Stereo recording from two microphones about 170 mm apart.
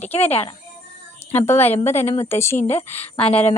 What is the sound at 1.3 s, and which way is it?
A woman's voice, 15° left (ahead or behind).